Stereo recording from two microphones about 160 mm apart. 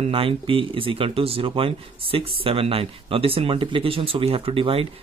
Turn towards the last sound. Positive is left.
turn(degrees=-35)  # may be behind; listen again after turning